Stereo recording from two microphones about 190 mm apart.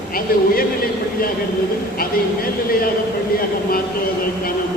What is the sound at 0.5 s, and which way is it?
Speech, 50° left (ahead or behind).